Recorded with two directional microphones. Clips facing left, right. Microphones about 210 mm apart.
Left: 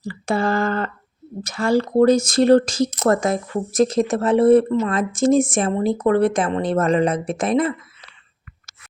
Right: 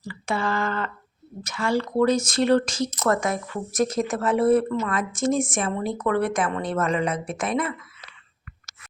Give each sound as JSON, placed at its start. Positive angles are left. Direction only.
{"t": 0.1, "sound": "speech", "side_deg": 40}